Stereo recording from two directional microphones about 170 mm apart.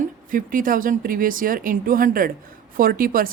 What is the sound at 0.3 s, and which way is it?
A woman's voice, 55° right (ahead or behind).